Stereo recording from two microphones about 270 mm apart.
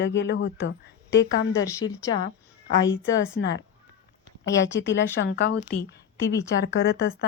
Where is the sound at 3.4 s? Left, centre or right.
Left.